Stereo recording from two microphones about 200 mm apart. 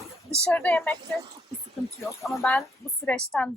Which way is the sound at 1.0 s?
20° right (ahead or behind).